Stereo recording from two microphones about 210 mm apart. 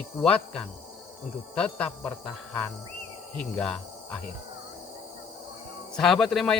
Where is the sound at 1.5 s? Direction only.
5° left (ahead or behind).